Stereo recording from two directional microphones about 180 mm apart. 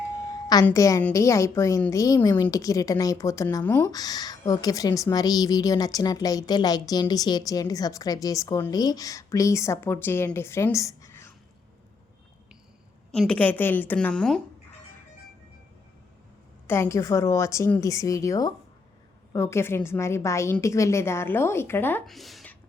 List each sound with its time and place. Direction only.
0.6 s a woman's voice: 15° left (ahead or behind)
13.1 s a woman's voice: 5° left (ahead or behind)
16.6 s a woman's voice: 15° left (ahead or behind)
22.1 s a sound: centre (ahead or behind)